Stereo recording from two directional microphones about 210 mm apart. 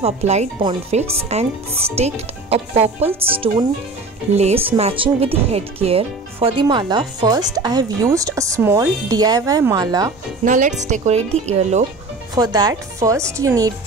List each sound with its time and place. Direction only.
0.0 s speech: 30° right (ahead or behind); by 10.1 s 15° right (ahead or behind)
10.4 s speech: 40° right (ahead or behind)
12.4 s speech: 20° right (ahead or behind)